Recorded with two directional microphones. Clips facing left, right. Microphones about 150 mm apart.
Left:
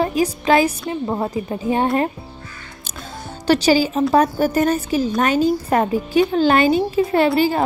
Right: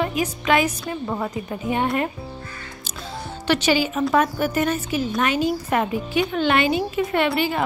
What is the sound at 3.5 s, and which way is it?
A woman's voice, 35° left (ahead or behind).